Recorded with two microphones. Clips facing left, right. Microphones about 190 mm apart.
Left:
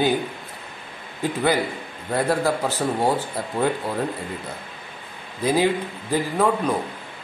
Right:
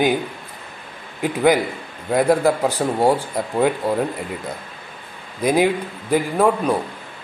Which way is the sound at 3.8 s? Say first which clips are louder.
Right 6 dB; 45° right (ahead or behind).